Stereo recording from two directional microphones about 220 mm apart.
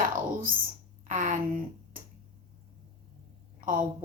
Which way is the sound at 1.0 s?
35° right (ahead or behind).